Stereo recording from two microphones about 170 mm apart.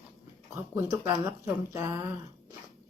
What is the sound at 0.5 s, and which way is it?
Speech, 15° right (ahead or behind).